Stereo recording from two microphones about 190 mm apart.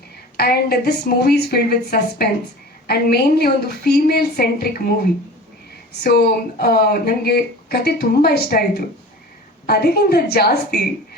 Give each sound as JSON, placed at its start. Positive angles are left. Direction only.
{"t": 0.3, "sound": "speech", "side_deg": 55}
{"t": 6.0, "sound": "speech", "side_deg": 55}
{"t": 9.6, "sound": "speech", "side_deg": 55}